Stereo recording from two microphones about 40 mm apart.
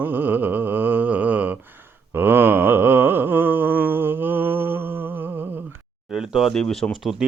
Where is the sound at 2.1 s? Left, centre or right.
Right.